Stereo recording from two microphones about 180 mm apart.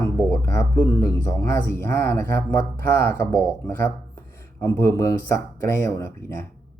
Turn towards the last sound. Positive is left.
turn(degrees=15)  # may be behind; listen again after turning